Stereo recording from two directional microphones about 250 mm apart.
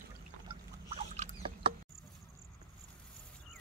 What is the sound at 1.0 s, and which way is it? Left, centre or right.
Rodents, right.